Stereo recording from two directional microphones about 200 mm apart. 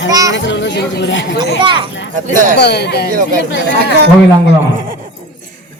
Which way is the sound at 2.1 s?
40° right (ahead or behind).